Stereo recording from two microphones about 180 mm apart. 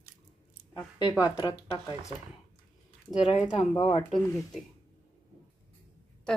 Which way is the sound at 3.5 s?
25° left (ahead or behind).